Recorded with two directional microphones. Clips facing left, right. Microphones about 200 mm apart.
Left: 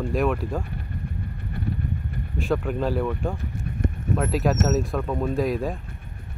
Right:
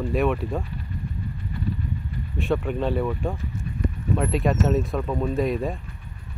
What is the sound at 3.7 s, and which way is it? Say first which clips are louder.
Horse: left 1 dB; 55° left (ahead or behind).